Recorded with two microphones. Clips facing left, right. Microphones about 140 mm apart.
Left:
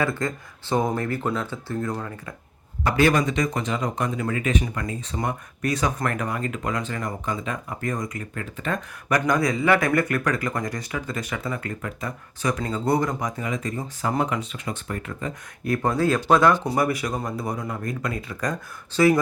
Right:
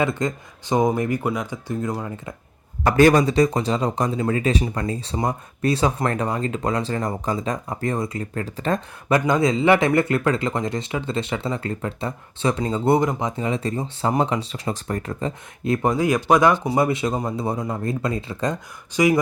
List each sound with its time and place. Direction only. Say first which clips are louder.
0.0 s speech: right 3 dB; 20° right (ahead or behind)
2.8 s speech: right 5 dB; 40° right (ahead or behind)
15.6 s speech: right 2 dB; 20° right (ahead or behind)